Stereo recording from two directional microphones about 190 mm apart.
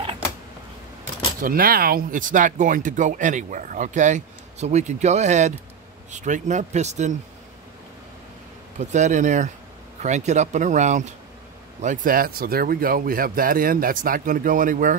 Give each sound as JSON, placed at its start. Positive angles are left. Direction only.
{"t": 1.4, "sound": "speech", "side_deg": -50}
{"t": 8.7, "sound": "speech", "side_deg": -40}